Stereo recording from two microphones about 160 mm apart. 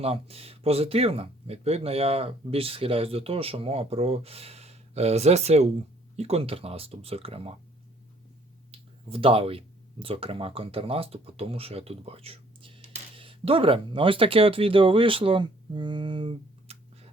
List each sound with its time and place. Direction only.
0.0 s speech: 40° right (ahead or behind)
9.0 s speech: 35° right (ahead or behind)